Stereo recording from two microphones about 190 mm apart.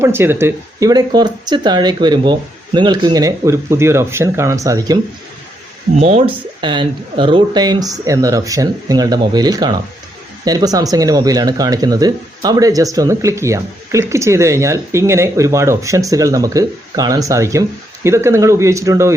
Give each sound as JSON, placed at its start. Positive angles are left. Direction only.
{"t": 0.0, "sound": "speech", "side_deg": -10}
{"t": 6.0, "sound": "speech", "side_deg": -30}